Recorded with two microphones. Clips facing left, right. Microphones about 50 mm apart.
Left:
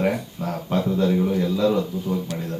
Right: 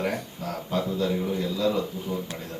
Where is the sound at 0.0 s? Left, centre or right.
Left.